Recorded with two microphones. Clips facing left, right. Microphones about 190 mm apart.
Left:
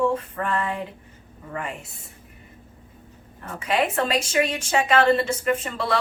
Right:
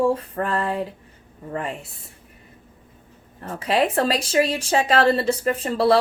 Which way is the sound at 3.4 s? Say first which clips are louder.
Right 3 dB; 35° right (ahead or behind).